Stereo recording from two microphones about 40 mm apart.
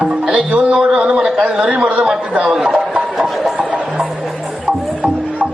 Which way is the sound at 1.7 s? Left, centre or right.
Right.